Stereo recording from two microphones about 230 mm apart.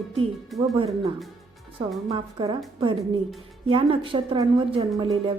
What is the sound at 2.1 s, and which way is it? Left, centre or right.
A woman's voice, right.